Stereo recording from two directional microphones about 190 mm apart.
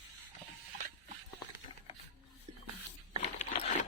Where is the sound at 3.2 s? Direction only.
30° left (ahead or behind).